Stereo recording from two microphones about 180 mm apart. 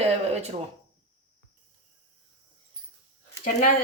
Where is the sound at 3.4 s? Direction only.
50° left (ahead or behind).